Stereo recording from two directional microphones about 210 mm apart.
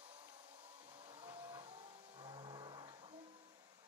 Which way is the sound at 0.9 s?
25° right (ahead or behind).